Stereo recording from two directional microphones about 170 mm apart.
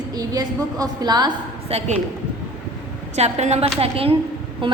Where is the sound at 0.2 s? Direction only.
20° right (ahead or behind).